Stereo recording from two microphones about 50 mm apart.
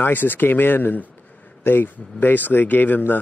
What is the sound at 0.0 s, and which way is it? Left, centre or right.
A man's voice, left.